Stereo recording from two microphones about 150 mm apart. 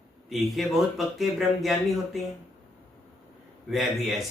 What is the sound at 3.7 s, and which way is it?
Speech, centre (ahead or behind).